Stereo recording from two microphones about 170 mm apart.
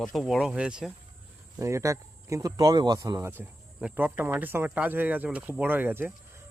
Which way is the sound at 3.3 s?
10° right (ahead or behind).